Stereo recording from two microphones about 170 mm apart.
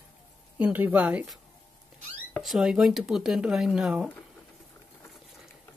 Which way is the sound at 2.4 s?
Centre (ahead or behind).